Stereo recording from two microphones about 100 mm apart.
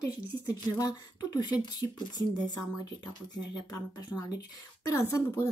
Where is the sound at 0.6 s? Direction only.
40° left (ahead or behind).